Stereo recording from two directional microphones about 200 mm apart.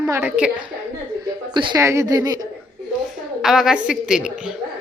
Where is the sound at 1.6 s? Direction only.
20° right (ahead or behind).